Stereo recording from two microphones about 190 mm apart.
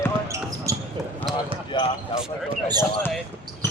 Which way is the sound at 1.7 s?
25° left (ahead or behind).